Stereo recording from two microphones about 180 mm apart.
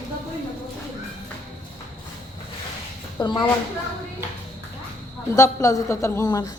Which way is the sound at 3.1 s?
25° left (ahead or behind).